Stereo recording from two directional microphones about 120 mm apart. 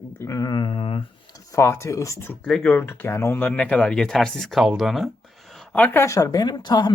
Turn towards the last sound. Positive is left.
turn(degrees=35)  # may be behind; listen again after turning